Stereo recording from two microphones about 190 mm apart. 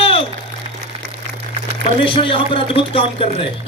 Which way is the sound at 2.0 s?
25° left (ahead or behind).